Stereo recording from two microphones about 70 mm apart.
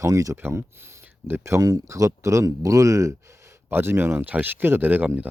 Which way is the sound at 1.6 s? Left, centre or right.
Right.